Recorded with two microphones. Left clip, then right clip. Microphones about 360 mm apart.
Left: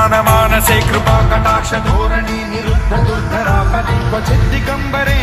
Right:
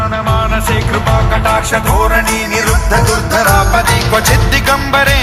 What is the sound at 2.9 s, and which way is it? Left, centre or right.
Music, right.